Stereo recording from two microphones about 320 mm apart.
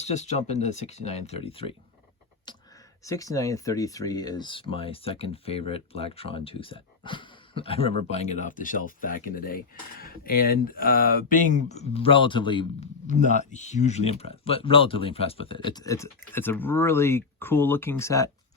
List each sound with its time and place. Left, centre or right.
0.0 s speech: left
3.0 s speech: centre